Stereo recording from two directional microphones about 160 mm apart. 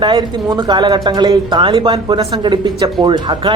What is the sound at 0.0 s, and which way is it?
Speech, 30° right (ahead or behind).